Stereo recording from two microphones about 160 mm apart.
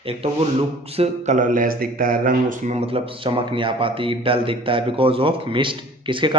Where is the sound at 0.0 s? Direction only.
40° right (ahead or behind).